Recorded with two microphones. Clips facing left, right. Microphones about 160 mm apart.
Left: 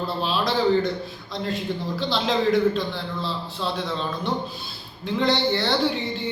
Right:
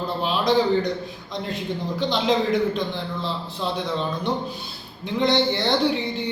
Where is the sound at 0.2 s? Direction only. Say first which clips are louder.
Right 3 dB; 15° right (ahead or behind).